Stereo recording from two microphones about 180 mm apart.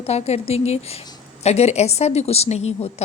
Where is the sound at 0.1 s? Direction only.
35° left (ahead or behind).